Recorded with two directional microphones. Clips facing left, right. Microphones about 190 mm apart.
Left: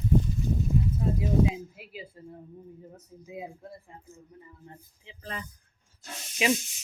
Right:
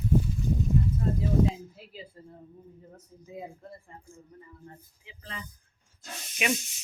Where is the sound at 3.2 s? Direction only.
10° left (ahead or behind).